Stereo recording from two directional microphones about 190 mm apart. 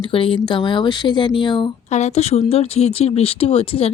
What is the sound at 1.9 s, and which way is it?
Speech, 35° left (ahead or behind).